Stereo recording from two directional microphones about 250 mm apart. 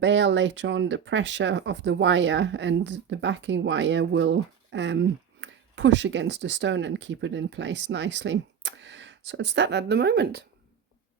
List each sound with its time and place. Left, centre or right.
0.0 s speech: right